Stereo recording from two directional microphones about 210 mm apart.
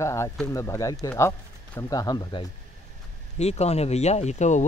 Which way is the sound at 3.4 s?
30° left (ahead or behind).